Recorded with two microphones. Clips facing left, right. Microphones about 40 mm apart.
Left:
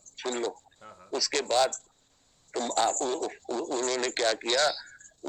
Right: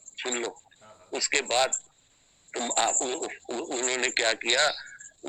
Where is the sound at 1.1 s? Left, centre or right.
Right.